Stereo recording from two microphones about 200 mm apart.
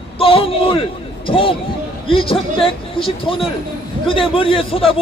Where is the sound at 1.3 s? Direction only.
25° left (ahead or behind).